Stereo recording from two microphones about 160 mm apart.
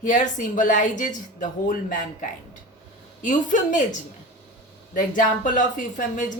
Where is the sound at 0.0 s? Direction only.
50° left (ahead or behind).